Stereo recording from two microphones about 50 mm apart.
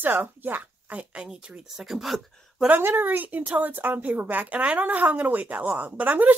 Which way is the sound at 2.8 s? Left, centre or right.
Right.